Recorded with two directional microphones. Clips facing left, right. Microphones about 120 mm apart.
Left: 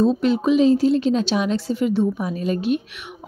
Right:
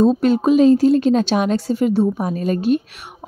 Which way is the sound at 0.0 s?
45° right (ahead or behind).